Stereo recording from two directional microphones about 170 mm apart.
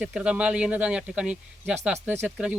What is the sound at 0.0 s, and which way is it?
Speech, 5° right (ahead or behind).